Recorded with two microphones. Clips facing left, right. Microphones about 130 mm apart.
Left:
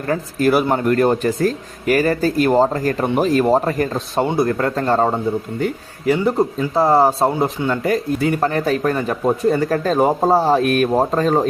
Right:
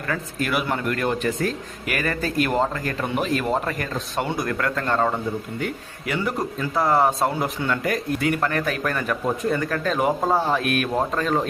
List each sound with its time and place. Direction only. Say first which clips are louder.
0.1 s a man's voice: left 9 dB; 35° left (ahead or behind)